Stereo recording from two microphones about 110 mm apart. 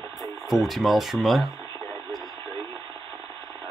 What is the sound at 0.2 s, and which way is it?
Speech, centre (ahead or behind).